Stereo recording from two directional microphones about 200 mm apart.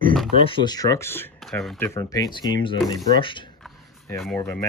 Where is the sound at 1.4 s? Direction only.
Centre (ahead or behind); by 3.5 s 25° left (ahead or behind).